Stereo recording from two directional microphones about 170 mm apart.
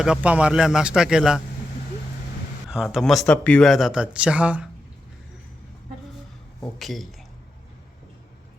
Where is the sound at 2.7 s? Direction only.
5° right (ahead or behind).